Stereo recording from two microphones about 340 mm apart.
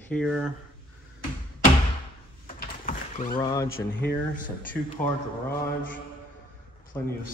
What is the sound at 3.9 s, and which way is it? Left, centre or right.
Speech, left.